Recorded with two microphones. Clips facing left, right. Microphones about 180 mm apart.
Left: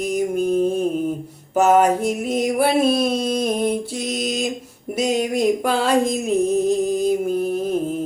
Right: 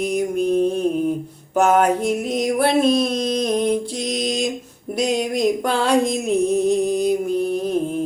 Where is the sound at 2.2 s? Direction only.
5° left (ahead or behind).